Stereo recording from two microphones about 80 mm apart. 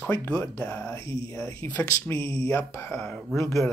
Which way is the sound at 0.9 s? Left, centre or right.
Left.